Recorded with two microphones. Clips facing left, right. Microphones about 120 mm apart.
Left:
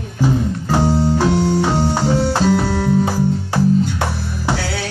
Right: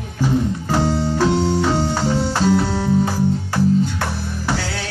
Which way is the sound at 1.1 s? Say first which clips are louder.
Left 1 dB; 15° left (ahead or behind).